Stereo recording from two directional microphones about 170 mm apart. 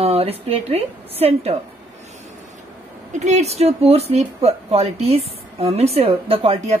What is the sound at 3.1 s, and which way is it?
A woman's voice, 45° right (ahead or behind).